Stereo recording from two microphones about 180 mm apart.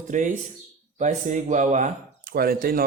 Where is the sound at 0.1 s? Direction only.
45° right (ahead or behind).